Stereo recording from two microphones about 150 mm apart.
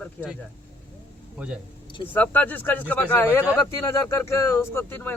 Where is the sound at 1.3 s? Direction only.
5° right (ahead or behind).